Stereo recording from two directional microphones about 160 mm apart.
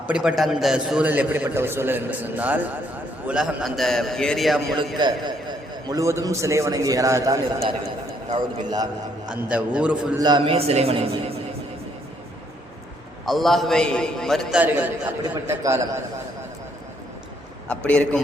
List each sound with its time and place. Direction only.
0.1 s a man's voice: 5° right (ahead or behind)
4.9 s a man's voice: 25° right (ahead or behind)
9.3 s a man's voice: 10° right (ahead or behind)
10.2 s a man's voice: 25° right (ahead or behind)
13.2 s a man's voice: centre (ahead or behind)
15.2 s a man's voice: 20° right (ahead or behind)
17.7 s a man's voice: 10° left (ahead or behind)